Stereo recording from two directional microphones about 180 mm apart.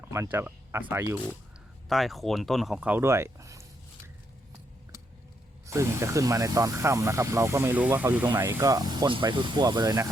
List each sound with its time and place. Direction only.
0.1 s speech: 15° right (ahead or behind)
1.9 s speech: centre (ahead or behind); by 4.1 s 15° right (ahead or behind)
5.6 s speech: 15° right (ahead or behind)